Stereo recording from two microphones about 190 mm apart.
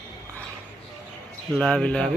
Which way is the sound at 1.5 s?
5° left (ahead or behind).